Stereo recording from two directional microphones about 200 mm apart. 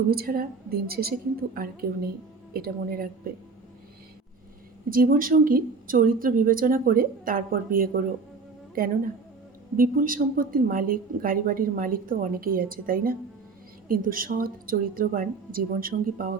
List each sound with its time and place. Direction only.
0.1 s a woman's voice: 50° right (ahead or behind)
4.9 s a woman's voice: 45° right (ahead or behind)